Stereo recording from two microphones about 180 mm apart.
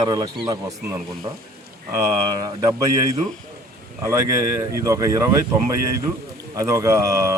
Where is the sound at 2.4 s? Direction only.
20° right (ahead or behind).